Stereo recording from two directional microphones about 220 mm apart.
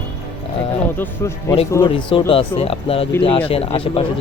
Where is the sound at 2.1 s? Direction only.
25° left (ahead or behind).